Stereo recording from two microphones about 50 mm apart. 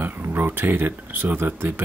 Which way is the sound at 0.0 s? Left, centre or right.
Right.